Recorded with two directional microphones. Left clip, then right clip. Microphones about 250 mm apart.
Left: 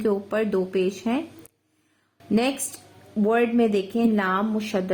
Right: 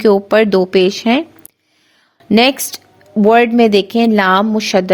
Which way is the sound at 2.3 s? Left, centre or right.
Right.